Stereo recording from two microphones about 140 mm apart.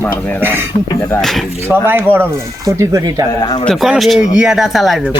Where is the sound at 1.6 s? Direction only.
15° right (ahead or behind).